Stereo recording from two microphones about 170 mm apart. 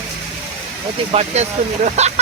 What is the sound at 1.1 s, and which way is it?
Speech, 40° right (ahead or behind).